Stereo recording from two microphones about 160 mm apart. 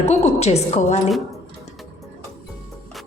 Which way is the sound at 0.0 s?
45° left (ahead or behind).